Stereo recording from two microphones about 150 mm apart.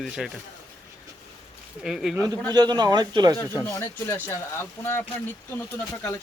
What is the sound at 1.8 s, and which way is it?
Speech, 5° right (ahead or behind).